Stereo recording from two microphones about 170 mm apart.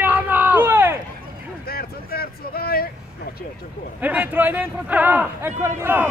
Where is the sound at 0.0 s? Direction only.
10° right (ahead or behind).